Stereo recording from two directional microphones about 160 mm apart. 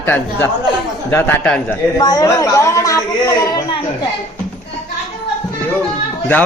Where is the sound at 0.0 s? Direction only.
15° left (ahead or behind).